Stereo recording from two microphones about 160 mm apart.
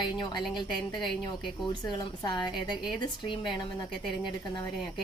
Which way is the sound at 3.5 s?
Centre (ahead or behind).